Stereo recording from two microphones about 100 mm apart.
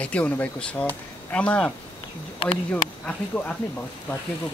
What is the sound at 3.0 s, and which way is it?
Speech, 10° left (ahead or behind).